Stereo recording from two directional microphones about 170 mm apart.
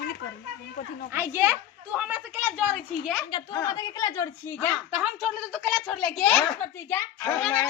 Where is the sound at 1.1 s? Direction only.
15° right (ahead or behind).